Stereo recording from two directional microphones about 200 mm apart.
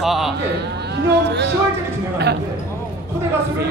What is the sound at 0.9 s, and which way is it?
Speech, 55° right (ahead or behind).